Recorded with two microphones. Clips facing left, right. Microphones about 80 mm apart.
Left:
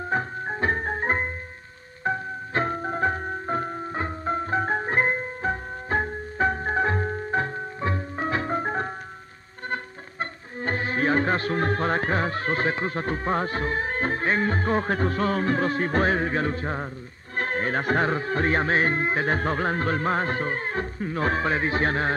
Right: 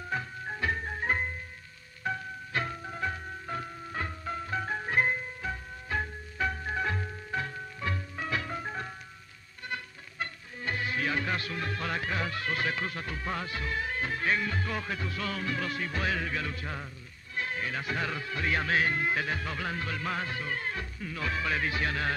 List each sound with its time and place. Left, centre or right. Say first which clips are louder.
0.1 s music: left 7 dB; left
17.4 s speech: left 8 dB; left